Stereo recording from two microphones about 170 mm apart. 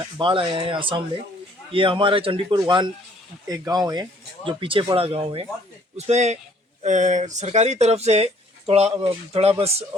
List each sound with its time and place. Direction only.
0.0 s speech: 30° right (ahead or behind)